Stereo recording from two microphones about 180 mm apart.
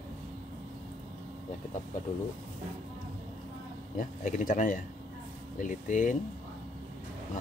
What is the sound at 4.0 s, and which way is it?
Speech, 45° left (ahead or behind).